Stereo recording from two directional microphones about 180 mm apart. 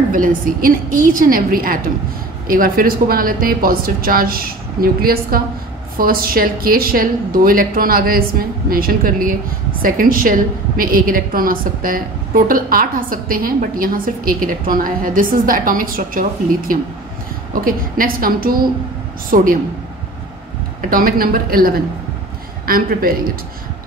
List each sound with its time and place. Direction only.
0.1 s a woman's voice: 50° right (ahead or behind)
20.9 s a woman's voice: 50° right (ahead or behind)